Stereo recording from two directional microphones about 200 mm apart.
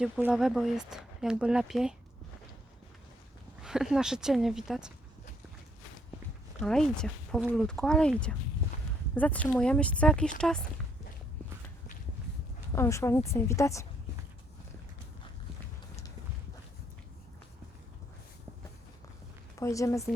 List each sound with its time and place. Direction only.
0.0 s speech: 5° right (ahead or behind)
3.6 s speech: 5° right (ahead or behind)
6.6 s speech: 5° left (ahead or behind)
12.7 s speech: 15° left (ahead or behind)
19.5 s speech: 15° left (ahead or behind)